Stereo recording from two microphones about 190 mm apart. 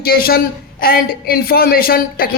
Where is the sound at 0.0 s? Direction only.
50° left (ahead or behind).